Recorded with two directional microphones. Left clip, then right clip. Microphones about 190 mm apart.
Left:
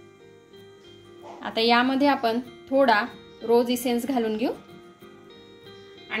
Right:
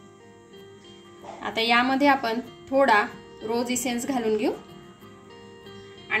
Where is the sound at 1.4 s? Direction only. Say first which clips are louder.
Left 1 dB; 30° left (ahead or behind).